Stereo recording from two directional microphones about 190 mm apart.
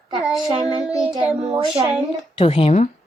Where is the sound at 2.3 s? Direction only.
30° left (ahead or behind).